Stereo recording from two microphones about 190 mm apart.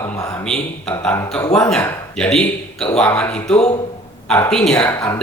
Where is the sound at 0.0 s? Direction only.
15° left (ahead or behind).